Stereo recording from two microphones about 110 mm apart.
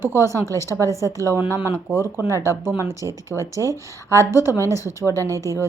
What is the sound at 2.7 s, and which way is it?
A woman's voice, 25° right (ahead or behind).